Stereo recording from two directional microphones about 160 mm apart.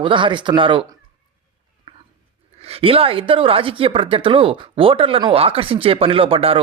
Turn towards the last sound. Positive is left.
turn(degrees=-35)  # may be behind; listen again after turning